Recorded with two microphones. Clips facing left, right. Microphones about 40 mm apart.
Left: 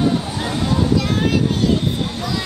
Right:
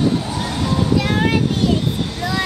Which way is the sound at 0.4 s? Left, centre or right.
Left.